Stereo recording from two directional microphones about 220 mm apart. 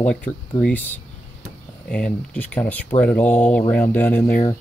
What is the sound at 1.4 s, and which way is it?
Speech, 5° left (ahead or behind).